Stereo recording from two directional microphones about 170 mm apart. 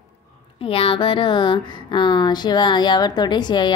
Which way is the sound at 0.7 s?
35° left (ahead or behind).